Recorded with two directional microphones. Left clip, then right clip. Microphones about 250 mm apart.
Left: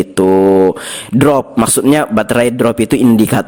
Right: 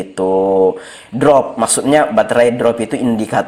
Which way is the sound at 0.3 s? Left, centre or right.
Left.